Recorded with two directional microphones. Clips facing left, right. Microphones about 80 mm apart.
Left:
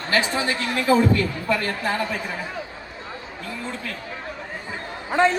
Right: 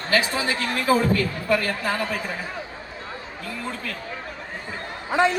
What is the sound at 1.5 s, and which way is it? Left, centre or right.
Speech, left.